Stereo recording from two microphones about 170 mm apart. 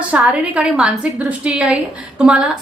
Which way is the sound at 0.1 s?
5° right (ahead or behind).